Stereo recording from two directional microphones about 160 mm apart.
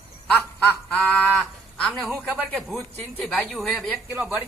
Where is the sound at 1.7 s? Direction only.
5° left (ahead or behind).